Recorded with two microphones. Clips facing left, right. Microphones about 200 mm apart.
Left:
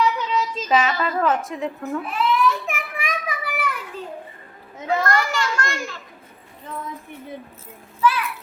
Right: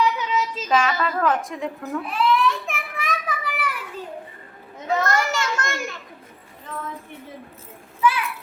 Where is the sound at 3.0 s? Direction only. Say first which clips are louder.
Even; 10° left (ahead or behind).